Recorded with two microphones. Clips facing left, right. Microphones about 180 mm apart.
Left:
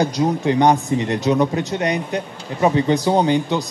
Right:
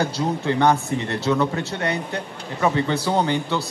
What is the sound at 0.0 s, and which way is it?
Speech, 15° left (ahead or behind).